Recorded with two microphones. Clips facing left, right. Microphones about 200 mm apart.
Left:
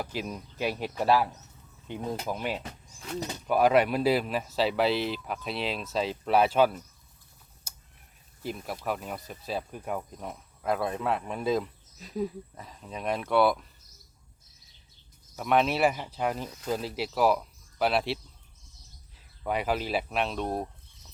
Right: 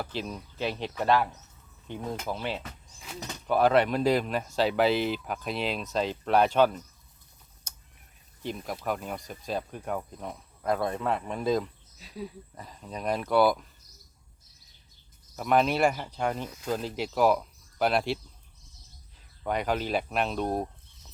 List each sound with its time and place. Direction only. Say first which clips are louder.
0.0 s speech: even; 10° left (ahead or behind)
7.7 s a sound: even; 5° left (ahead or behind)
8.4 s speech: right 1 dB; 5° left (ahead or behind)
11.9 s speech: left 8 dB; 45° left (ahead or behind)
12.5 s speech: right 1 dB; centre (ahead or behind)
15.4 s speech: right 1 dB; centre (ahead or behind)
19.5 s speech: even; 5° left (ahead or behind)